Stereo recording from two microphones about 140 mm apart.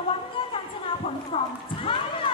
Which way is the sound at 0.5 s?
40° left (ahead or behind).